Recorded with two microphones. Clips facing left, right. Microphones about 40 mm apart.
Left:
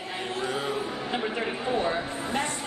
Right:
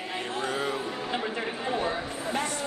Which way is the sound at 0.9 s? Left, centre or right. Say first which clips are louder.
Left 1 dB; centre.